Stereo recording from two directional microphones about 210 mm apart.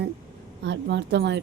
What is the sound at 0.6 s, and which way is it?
Speech, 55° right (ahead or behind).